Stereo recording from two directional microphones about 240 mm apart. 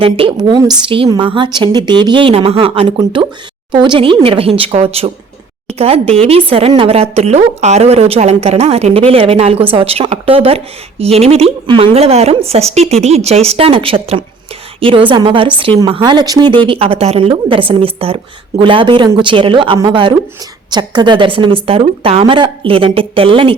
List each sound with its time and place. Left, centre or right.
0.0 s a woman's voice: right